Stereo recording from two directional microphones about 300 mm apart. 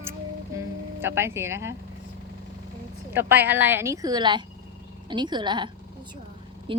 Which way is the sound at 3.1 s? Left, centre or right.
Centre.